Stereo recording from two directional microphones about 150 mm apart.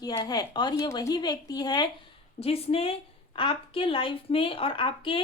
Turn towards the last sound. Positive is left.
turn(degrees=35)  # may be behind; listen again after turning